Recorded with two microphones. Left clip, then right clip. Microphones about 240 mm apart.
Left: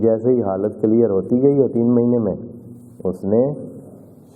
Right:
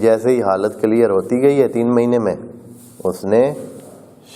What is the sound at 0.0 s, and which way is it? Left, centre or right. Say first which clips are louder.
Speech: right 3 dB; right.